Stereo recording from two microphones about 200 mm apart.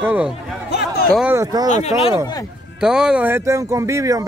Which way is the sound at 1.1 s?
10° right (ahead or behind).